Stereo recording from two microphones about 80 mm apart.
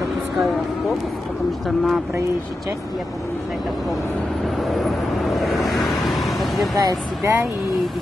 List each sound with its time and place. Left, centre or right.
4.7 s vehicle: centre
6.8 s speech: right